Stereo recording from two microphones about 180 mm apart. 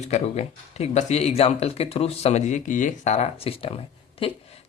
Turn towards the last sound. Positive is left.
turn(degrees=30)  # may be behind; listen again after turning